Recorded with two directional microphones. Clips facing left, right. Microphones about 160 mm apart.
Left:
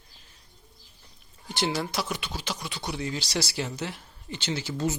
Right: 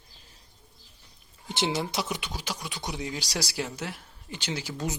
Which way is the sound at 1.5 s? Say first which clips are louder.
Even; 20° right (ahead or behind).